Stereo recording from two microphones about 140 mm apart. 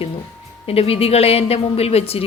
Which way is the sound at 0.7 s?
45° left (ahead or behind).